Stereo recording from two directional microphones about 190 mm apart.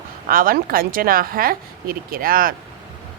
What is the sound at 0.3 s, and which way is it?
Speech, 50° right (ahead or behind).